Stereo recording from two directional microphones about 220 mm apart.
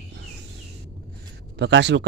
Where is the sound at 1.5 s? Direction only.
50° right (ahead or behind).